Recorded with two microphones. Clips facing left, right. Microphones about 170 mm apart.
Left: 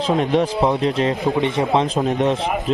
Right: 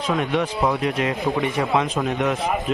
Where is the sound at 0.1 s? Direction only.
30° left (ahead or behind).